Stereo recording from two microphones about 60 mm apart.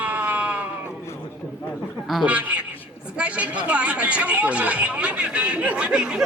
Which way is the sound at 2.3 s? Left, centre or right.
Right.